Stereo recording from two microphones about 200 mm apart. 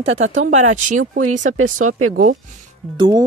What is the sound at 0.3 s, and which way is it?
Speech, 35° right (ahead or behind).